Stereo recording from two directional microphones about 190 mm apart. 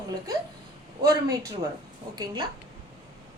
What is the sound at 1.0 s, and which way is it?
Speech, 15° right (ahead or behind).